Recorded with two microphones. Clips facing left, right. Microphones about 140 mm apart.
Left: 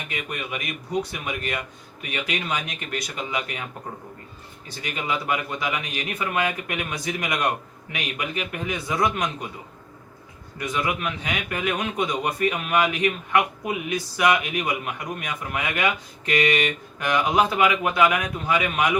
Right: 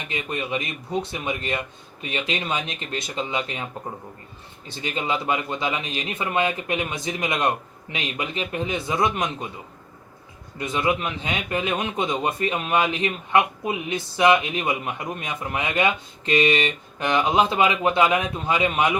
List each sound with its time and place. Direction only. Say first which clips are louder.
0.1 s a man's voice: right 5 dB; 25° right (ahead or behind)
4.8 s a man's voice: right 2 dB; 25° right (ahead or behind)
10.6 s a man's voice: right 3 dB; 25° right (ahead or behind)